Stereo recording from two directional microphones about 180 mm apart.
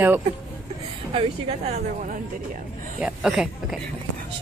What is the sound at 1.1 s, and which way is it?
A woman's voice, 35° right (ahead or behind).